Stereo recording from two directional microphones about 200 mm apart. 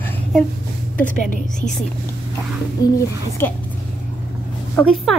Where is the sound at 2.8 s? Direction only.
20° left (ahead or behind).